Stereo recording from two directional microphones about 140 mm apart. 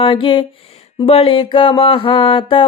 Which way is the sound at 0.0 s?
40° left (ahead or behind).